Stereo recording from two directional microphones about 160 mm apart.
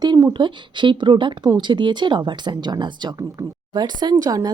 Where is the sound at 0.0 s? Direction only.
25° right (ahead or behind).